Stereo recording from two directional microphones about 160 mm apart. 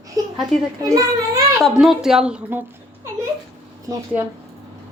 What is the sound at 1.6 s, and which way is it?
A woman's voice, centre (ahead or behind).